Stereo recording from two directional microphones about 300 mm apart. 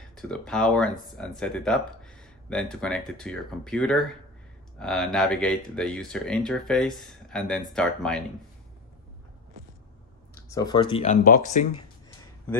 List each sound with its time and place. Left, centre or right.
0.1 s speech: centre
10.5 s speech: centre